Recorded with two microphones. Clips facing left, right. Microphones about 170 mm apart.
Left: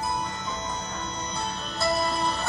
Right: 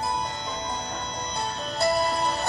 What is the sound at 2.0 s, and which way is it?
Music, 35° right (ahead or behind).